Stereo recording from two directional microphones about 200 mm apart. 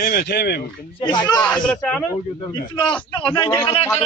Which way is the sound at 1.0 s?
20° left (ahead or behind).